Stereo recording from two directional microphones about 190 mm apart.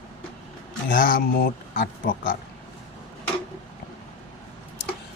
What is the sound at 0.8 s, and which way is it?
Speech, 45° left (ahead or behind).